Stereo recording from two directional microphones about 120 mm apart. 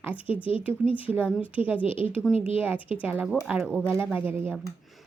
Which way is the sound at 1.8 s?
50° left (ahead or behind).